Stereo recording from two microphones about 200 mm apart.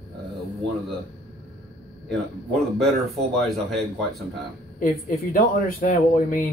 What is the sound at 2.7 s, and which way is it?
Speech, centre (ahead or behind).